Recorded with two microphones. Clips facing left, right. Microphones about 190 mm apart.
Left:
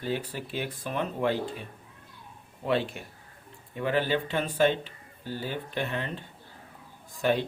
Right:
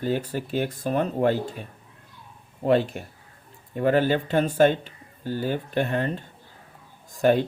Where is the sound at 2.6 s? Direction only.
45° right (ahead or behind).